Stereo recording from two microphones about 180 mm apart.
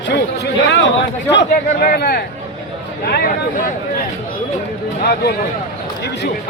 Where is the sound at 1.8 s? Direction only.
55° left (ahead or behind).